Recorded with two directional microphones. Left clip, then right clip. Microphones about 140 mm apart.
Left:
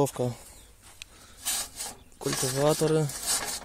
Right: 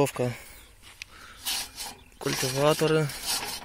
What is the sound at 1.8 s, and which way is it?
Speech, 10° left (ahead or behind).